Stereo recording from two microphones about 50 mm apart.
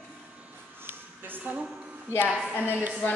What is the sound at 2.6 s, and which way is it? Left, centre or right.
Speech, right.